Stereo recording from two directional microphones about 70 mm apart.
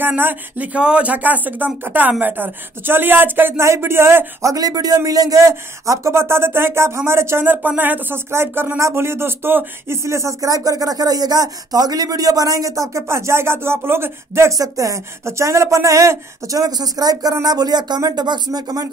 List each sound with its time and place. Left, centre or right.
0.0 s speech: right
0.7 s a man's voice: centre; by 4.5 s right
4.5 s a man's voice: right
8.3 s a man's voice: right
10.0 s speech: right